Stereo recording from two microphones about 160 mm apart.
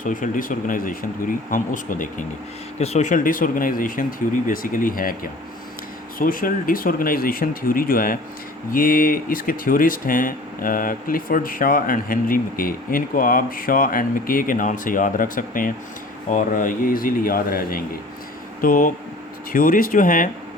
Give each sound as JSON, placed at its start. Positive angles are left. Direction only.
{"t": 0.0, "sound": "speech", "side_deg": 55}
{"t": 2.7, "sound": "speech", "side_deg": 45}